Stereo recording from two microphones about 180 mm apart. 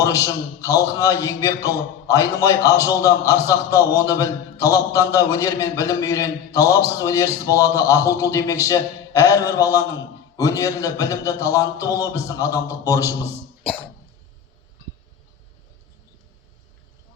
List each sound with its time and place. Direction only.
0.0 s a man's voice: 20° left (ahead or behind)